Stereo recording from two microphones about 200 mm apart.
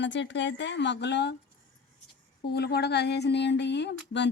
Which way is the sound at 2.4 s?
55° left (ahead or behind).